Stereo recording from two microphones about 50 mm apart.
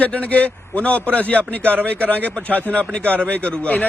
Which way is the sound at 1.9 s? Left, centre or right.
Left.